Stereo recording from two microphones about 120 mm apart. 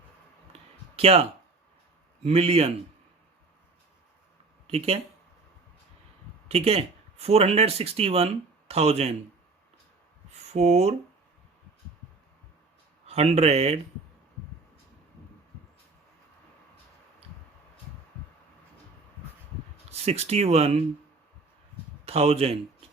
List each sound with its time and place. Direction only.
0.9 s speech: 55° right (ahead or behind)
4.6 s speech: 55° right (ahead or behind)
6.5 s speech: 60° right (ahead or behind)
10.5 s speech: 65° right (ahead or behind)
13.1 s speech: 60° right (ahead or behind)
19.9 s speech: 60° right (ahead or behind)
22.0 s speech: 55° right (ahead or behind)